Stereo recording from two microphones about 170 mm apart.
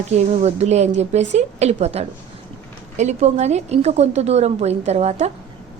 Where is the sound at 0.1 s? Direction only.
40° right (ahead or behind).